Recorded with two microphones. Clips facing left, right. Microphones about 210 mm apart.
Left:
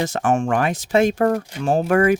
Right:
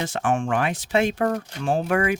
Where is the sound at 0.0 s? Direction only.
45° left (ahead or behind).